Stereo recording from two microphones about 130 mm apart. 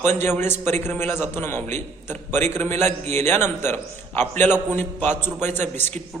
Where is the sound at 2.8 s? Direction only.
60° right (ahead or behind).